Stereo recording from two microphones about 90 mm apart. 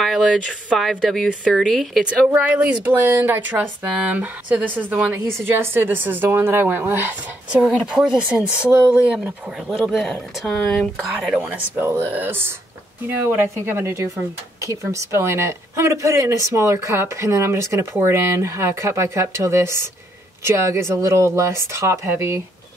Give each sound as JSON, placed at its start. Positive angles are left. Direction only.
{"t": 0.0, "sound": "speech", "side_deg": 0}
{"t": 2.0, "sound": "a woman's voice", "side_deg": -10}
{"t": 7.6, "sound": "speech", "side_deg": -5}
{"t": 9.8, "sound": "speech", "side_deg": 5}
{"t": 11.2, "sound": "speech", "side_deg": -5}
{"t": 11.5, "sound": "a woman's voice", "side_deg": -25}